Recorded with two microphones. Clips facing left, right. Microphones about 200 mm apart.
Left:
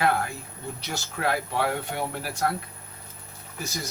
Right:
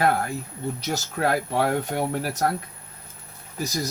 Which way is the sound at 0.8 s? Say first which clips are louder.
Right 5 dB; 40° right (ahead or behind).